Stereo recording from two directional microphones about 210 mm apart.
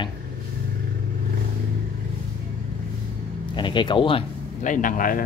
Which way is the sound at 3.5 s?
20° left (ahead or behind).